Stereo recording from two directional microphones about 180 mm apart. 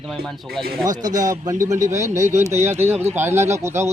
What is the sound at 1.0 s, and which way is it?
A man's voice, 20° right (ahead or behind).